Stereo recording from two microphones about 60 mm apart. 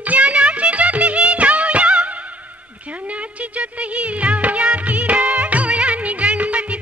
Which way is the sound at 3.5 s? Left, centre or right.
Right.